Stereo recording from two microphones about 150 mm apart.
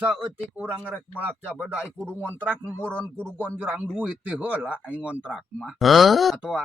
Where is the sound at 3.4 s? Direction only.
10° right (ahead or behind).